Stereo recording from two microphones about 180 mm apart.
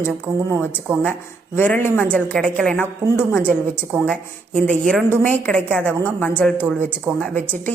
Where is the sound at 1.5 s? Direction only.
10° left (ahead or behind).